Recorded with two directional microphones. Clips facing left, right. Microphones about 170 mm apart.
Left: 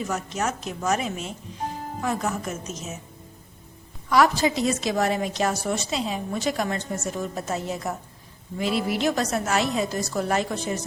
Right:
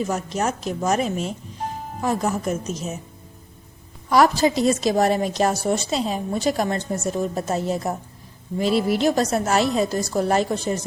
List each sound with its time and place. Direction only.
0.1 s a woman's voice: 35° right (ahead or behind)
4.1 s a woman's voice: 40° right (ahead or behind)